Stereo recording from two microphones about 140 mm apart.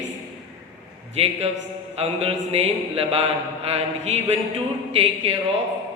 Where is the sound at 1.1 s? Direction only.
45° right (ahead or behind).